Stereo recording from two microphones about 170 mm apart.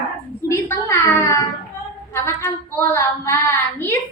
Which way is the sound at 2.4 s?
15° left (ahead or behind).